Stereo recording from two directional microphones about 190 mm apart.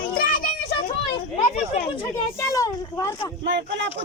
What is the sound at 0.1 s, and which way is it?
Children playing, 50° left (ahead or behind).